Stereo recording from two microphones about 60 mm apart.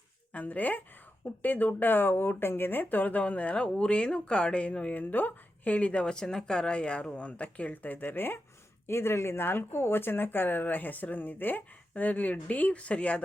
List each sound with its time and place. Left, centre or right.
0.3 s speech: left